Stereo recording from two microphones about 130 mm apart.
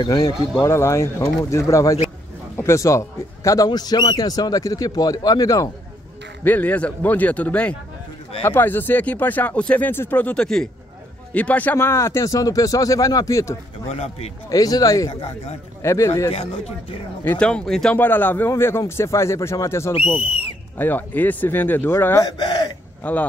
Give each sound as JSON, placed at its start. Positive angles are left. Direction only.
{"t": 0.0, "sound": "speech", "side_deg": 35}
{"t": 0.7, "sound": "a man's voice", "side_deg": 20}
{"t": 6.4, "sound": "a man's voice", "side_deg": 10}
{"t": 13.8, "sound": "speech", "side_deg": 55}
{"t": 14.5, "sound": "a man's voice", "side_deg": 30}
{"t": 17.2, "sound": "a man's voice", "side_deg": 10}
{"t": 19.9, "sound": "speech", "side_deg": 50}
{"t": 20.7, "sound": "speech", "side_deg": 15}
{"t": 22.2, "sound": "speech", "side_deg": 35}
{"t": 23.0, "sound": "speech", "side_deg": 10}